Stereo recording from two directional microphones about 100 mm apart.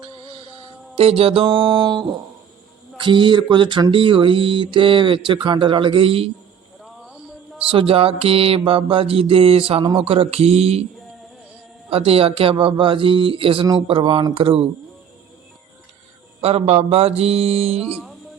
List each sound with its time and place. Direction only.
0.9 s speech: 70° right (ahead or behind)
6.8 s a sound: centre (ahead or behind)
7.7 s mantra: 65° right (ahead or behind); by 10.8 s 85° right
11.9 s speech: 70° right (ahead or behind)
14.3 s mantra: 70° right (ahead or behind)
16.4 s mantra: 90° right